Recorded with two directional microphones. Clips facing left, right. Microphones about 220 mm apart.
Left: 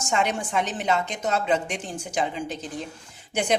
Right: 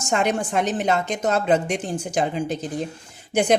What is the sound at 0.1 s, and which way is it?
A woman's voice, 45° right (ahead or behind).